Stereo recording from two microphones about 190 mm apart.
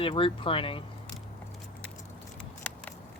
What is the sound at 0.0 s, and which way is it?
Speech, 30° left (ahead or behind).